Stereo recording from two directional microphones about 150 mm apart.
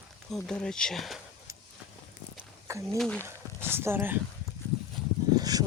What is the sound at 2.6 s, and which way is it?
Speech, 20° right (ahead or behind).